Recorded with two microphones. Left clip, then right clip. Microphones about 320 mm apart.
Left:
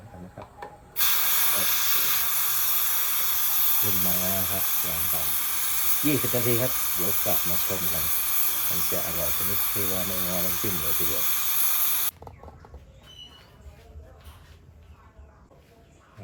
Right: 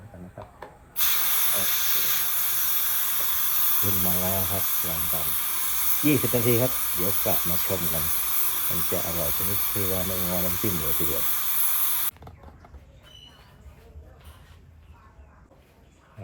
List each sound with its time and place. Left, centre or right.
0.9 s hiss: centre